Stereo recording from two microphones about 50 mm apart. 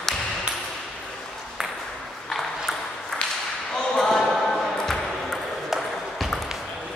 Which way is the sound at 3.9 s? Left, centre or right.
Centre.